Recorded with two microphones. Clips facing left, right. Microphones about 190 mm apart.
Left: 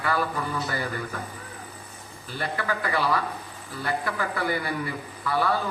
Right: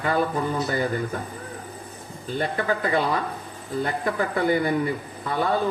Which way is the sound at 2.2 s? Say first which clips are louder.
Right 5 dB; 20° right (ahead or behind).